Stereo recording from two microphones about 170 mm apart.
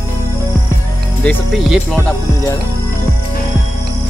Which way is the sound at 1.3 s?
Centre (ahead or behind).